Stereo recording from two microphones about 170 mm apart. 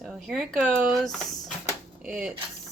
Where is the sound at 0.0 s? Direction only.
Centre (ahead or behind).